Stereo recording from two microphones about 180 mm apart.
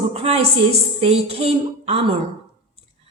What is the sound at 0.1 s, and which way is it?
A woman's voice, 35° right (ahead or behind).